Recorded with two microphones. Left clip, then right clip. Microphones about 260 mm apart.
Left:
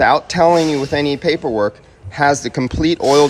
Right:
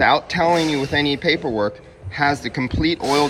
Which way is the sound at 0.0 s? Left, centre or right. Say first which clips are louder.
Left 4 dB; centre.